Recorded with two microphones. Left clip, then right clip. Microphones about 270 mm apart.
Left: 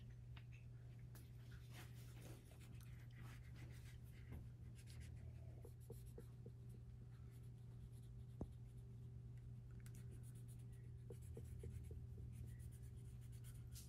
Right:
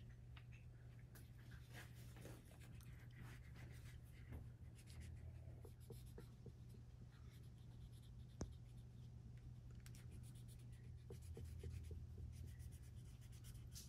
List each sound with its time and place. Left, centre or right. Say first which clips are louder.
8.4 s writing: right 1 dB; centre